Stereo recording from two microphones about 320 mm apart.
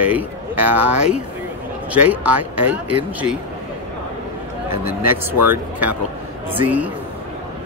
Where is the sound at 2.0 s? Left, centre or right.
Centre.